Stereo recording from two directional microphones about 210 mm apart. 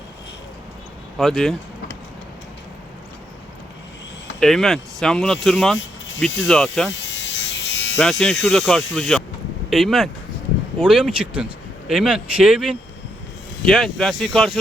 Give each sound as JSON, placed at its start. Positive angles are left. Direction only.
{"t": 1.2, "sound": "speech", "side_deg": 0}
{"t": 4.4, "sound": "speech", "side_deg": 0}
{"t": 7.0, "sound": "electric shaver", "side_deg": 60}
{"t": 7.9, "sound": "speech", "side_deg": 0}